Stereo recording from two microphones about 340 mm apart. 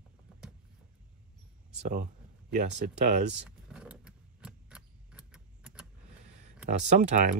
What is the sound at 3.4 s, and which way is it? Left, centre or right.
Keys jangling, centre.